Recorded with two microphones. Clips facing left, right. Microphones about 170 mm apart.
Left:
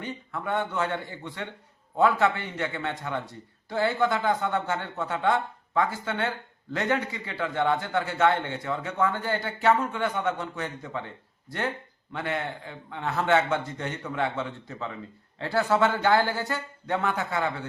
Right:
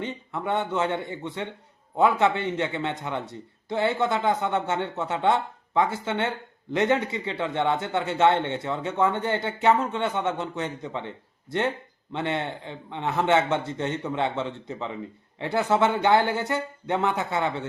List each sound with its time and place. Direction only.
0.0 s a man's voice: 25° right (ahead or behind)
12.1 s a man's voice: 25° right (ahead or behind)